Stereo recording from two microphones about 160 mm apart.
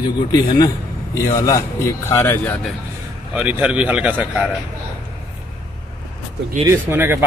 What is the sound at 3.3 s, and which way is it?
Speech, 10° right (ahead or behind).